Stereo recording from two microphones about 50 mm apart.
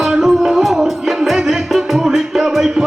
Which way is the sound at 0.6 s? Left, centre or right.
Centre.